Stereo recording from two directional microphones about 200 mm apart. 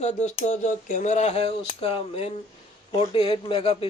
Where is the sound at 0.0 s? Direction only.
35° left (ahead or behind).